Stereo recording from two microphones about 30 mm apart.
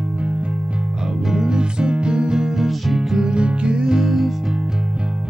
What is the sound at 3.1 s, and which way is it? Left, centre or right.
Music, right.